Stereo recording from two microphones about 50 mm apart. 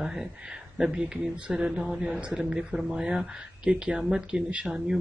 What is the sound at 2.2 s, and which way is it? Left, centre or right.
Speech, right.